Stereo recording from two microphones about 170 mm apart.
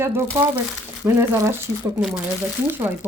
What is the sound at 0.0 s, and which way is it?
Speech, 15° right (ahead or behind).